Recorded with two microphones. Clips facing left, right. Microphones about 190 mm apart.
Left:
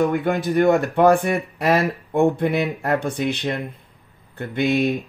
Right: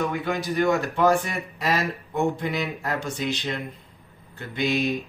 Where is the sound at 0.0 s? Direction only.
55° left (ahead or behind).